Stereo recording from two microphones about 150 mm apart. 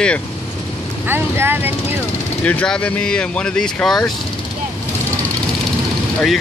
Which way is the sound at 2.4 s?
10° left (ahead or behind).